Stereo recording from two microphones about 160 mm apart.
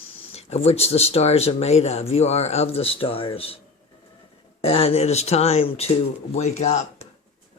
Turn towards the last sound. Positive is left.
turn(degrees=45)  # may be behind; listen again after turning